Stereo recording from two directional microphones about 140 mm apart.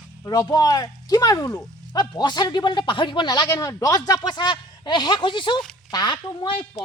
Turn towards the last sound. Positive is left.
turn(degrees=30)  # may be behind; listen again after turning